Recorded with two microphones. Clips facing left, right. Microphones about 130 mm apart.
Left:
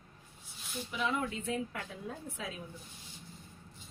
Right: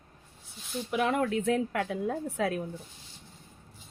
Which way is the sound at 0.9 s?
65° right (ahead or behind).